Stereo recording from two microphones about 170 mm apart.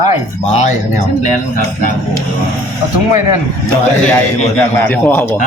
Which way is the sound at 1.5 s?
55° left (ahead or behind).